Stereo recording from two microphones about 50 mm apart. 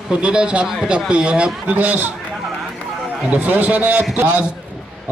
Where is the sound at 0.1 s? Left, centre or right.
Centre.